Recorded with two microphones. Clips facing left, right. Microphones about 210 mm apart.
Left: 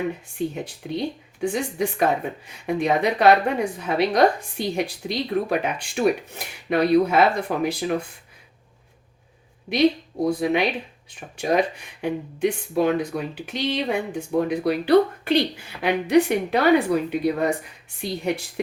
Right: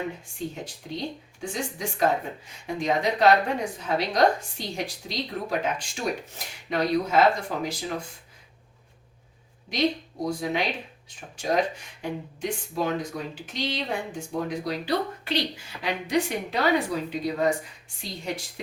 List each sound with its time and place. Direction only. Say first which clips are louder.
0.3 s speech: left 6 dB; 60° left (ahead or behind)
9.6 s a woman's voice: left 6 dB; 60° left (ahead or behind)
12.0 s speech: left 7 dB; 60° left (ahead or behind)